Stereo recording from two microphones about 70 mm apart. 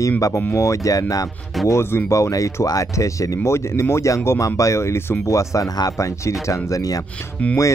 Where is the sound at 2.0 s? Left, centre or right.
Left.